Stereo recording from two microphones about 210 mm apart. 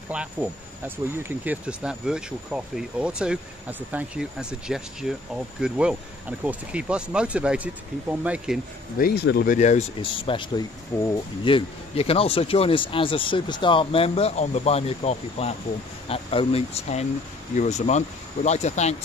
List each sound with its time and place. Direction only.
0.1 s speech: 5° right (ahead or behind)
8.9 s speech: 50° left (ahead or behind); by 18.9 s 30° left (ahead or behind)